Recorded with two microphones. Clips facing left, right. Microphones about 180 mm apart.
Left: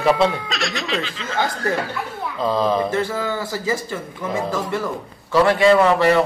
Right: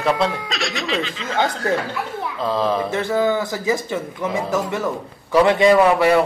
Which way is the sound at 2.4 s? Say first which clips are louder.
Left 2 dB; centre (ahead or behind).